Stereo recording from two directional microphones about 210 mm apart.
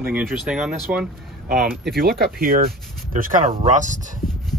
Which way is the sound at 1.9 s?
45° right (ahead or behind).